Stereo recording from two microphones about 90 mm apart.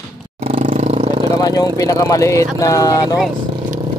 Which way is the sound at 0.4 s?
90° right.